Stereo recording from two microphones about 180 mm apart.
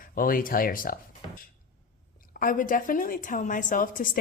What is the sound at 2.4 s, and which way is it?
A woman's voice, 50° left (ahead or behind).